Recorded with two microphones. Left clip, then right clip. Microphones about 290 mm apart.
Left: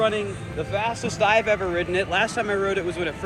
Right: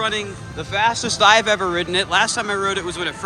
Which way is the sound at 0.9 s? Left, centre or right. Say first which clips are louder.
Right 8 dB; centre.